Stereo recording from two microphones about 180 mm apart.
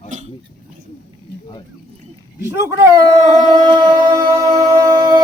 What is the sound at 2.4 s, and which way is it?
Speech, 15° right (ahead or behind).